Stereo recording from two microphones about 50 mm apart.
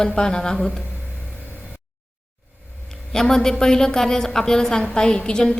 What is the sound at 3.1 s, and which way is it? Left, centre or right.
A woman's voice, centre.